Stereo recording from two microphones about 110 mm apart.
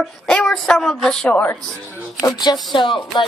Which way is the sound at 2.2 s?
40° left (ahead or behind).